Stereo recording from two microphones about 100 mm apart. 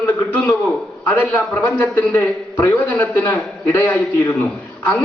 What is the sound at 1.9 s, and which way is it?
A man's voice, 25° left (ahead or behind).